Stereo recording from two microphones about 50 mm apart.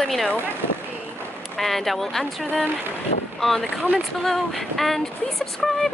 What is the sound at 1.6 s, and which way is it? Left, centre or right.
Speech, centre.